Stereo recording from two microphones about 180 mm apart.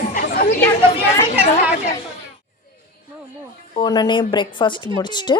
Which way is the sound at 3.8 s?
25° left (ahead or behind).